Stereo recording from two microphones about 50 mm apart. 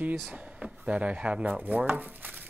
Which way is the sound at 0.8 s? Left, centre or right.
Right.